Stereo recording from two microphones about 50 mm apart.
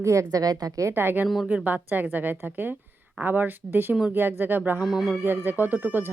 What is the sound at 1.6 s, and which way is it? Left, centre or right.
A woman's voice, right.